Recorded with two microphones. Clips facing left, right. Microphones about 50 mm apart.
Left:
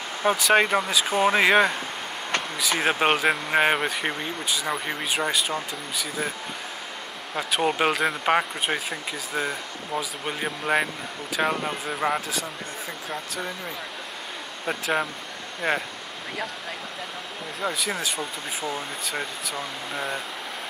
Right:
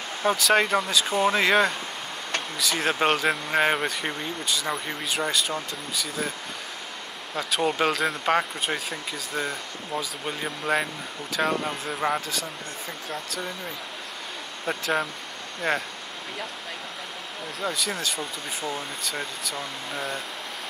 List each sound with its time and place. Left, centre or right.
0.2 s speech: centre
2.8 s speech: centre
7.3 s speech: centre
14.7 s speech: centre
17.6 s speech: centre